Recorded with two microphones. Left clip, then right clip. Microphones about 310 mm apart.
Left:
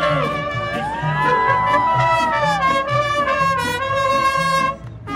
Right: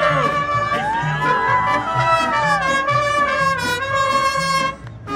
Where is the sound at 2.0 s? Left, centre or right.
Left.